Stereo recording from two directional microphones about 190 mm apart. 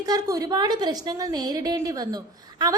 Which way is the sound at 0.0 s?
20° right (ahead or behind).